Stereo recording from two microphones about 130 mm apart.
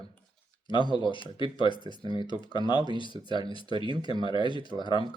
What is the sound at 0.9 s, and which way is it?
Speech, 35° left (ahead or behind).